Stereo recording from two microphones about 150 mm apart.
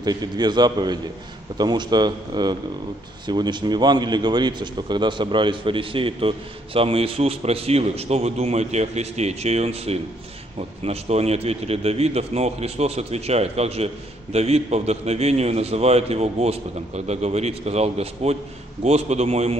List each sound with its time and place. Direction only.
0.0 s a man's voice: 25° right (ahead or behind); by 19.5 s 45° right (ahead or behind)